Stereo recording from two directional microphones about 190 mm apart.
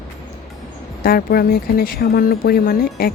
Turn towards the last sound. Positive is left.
turn(degrees=50)  # may be behind; listen again after turning